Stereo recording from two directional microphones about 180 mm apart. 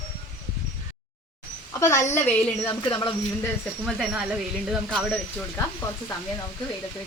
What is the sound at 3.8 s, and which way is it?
Speech, centre (ahead or behind).